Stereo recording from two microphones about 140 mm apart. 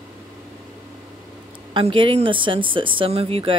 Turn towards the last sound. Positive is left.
turn(degrees=-40)  # may be behind; listen again after turning